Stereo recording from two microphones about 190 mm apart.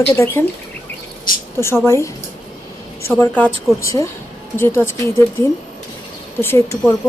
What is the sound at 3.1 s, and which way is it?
Speech, 10° left (ahead or behind).